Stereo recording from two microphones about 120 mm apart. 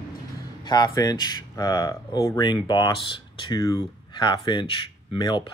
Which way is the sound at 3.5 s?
30° left (ahead or behind).